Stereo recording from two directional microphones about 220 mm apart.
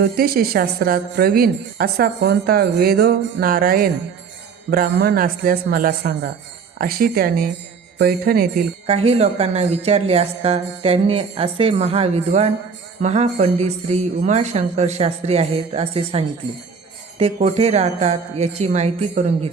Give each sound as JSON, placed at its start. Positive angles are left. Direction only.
{"t": 0.0, "sound": "a woman's voice", "side_deg": -45}
{"t": 8.9, "sound": "speech", "side_deg": -25}